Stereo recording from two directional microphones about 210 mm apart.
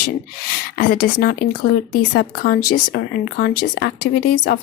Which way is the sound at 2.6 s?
90° left.